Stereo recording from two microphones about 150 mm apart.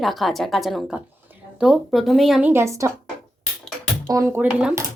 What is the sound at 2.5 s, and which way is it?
Speech, 20° right (ahead or behind).